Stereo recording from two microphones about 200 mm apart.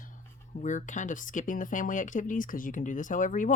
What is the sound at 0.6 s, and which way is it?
Speech, 40° left (ahead or behind).